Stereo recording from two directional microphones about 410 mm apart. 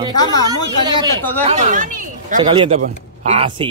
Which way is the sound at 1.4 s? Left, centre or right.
Centre.